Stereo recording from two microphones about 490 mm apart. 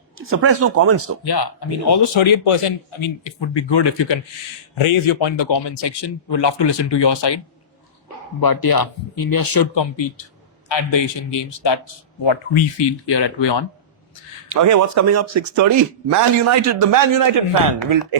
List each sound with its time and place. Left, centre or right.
0.2 s speech: right
1.2 s a man's voice: left
4.7 s a man's voice: left
8.4 s a man's voice: left
13.1 s speech: left
14.5 s speech: right